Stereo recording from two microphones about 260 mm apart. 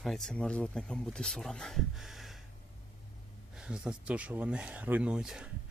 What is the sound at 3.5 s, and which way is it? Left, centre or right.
Speech, centre.